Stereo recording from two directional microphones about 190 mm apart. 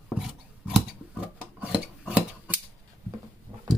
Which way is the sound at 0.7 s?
5° right (ahead or behind).